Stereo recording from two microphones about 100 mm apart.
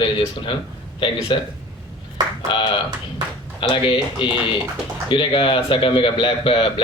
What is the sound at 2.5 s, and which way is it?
A man's voice, 55° left (ahead or behind).